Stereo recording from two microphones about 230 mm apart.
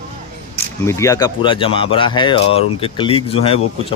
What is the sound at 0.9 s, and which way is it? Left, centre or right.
A man's voice, centre.